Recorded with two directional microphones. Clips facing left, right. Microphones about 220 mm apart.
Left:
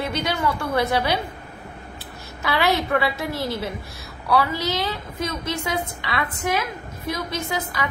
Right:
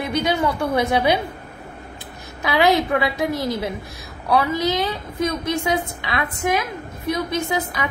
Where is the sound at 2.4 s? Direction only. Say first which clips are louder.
Right 4 dB; 15° right (ahead or behind).